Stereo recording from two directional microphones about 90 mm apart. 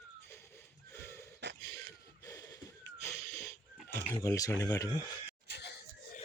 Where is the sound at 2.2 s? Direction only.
40° left (ahead or behind).